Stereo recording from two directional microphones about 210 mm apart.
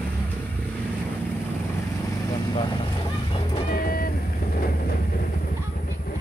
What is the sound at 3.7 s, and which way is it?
Vehicle, 45° left (ahead or behind).